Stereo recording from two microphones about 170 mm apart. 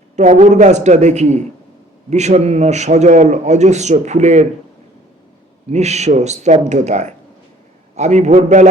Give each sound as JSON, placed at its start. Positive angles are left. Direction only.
{"t": 0.2, "sound": "a man's voice", "side_deg": -45}
{"t": 5.7, "sound": "a man's voice", "side_deg": -40}